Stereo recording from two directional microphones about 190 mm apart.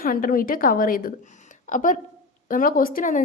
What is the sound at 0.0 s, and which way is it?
A woman's voice, 45° left (ahead or behind).